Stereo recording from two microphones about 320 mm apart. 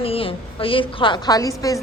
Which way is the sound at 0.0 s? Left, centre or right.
Centre.